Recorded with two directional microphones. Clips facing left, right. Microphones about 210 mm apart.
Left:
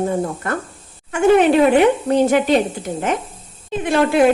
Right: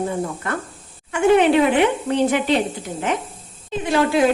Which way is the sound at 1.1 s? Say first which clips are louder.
Left 2 dB; 45° left (ahead or behind).